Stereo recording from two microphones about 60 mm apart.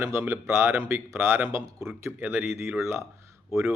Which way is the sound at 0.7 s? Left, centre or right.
Right.